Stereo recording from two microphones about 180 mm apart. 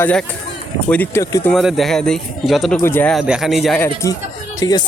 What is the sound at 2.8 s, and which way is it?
Speech, 10° left (ahead or behind).